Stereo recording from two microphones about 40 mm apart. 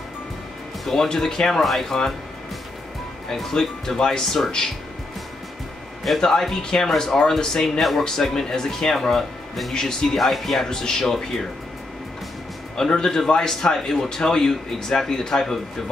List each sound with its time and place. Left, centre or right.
0.8 s a man's voice: centre
3.5 s a man's voice: centre
6.2 s a man's voice: centre
10.1 s a man's voice: centre
12.7 s a man's voice: centre